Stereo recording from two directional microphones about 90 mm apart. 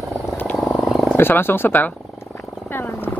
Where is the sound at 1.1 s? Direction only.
25° left (ahead or behind).